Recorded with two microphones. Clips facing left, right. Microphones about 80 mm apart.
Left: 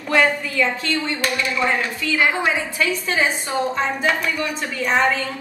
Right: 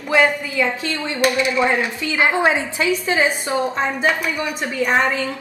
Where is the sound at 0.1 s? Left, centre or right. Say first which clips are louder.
Right 1 dB; centre.